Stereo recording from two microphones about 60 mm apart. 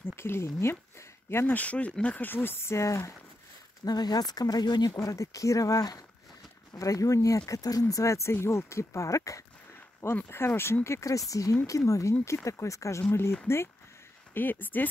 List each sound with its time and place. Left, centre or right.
0.0 s speech: left
1.5 s speech: left
2.2 s speech: left
3.8 s speech: left
6.7 s speech: left
7.9 s speech: left
10.2 s speech: left
13.1 s speech: left
14.3 s speech: left